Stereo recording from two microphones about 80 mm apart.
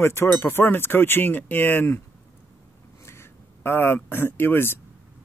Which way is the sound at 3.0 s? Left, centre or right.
Left.